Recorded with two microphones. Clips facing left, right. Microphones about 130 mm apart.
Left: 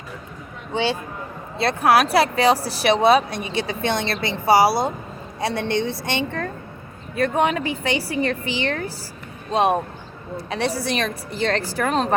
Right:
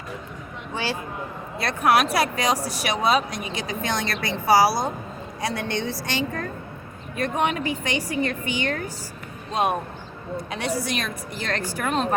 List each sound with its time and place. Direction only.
0.7 s speech: 25° left (ahead or behind)